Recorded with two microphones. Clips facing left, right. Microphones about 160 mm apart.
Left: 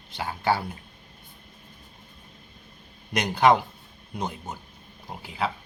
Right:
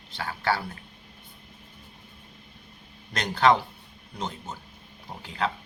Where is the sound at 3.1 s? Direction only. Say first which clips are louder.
Left 2 dB; 15° left (ahead or behind).